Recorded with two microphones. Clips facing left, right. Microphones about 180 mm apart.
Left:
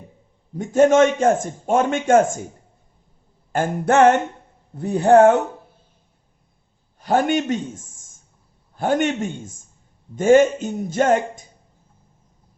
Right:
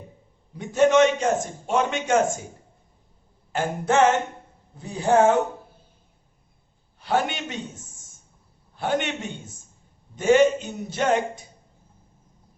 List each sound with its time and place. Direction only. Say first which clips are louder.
0.5 s a man's voice: left 4 dB; 45° left (ahead or behind)
3.5 s a sound: left 4 dB; 55° left (ahead or behind)
7.0 s a man's voice: left 6 dB; 45° left (ahead or behind)